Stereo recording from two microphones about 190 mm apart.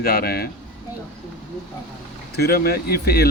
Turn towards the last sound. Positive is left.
turn(degrees=55)  # may be behind; listen again after turning